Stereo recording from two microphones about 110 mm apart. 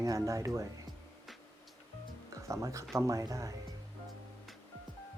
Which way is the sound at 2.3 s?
30° right (ahead or behind).